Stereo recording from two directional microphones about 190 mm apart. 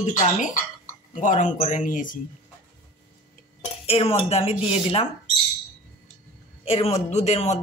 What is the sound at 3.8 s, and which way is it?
Speech, 30° left (ahead or behind).